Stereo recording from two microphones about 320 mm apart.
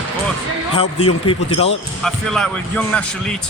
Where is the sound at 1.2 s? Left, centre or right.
Centre.